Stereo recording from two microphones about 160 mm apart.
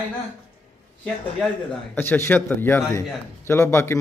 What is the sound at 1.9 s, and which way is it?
A man's voice, 15° left (ahead or behind).